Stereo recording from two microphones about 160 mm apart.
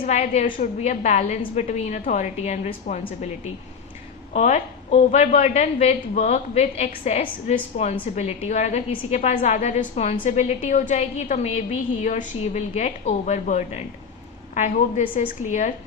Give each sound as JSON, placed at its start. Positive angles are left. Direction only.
{"t": 0.2, "sound": "a woman's voice", "side_deg": 50}